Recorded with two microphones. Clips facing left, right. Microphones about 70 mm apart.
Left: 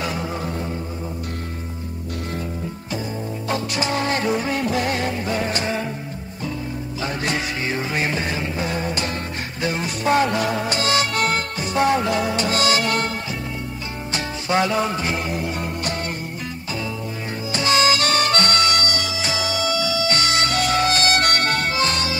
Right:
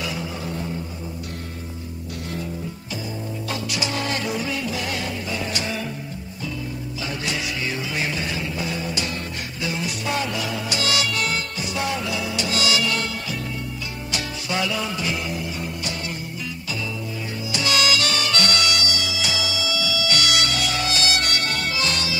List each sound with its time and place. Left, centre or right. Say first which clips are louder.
0.0 s music: left 4 dB; left
3.4 s music: left 5 dB; left
7.0 s music: left 4 dB; left
14.1 s music: left 6 dB; left
17.5 s music: left 4 dB; left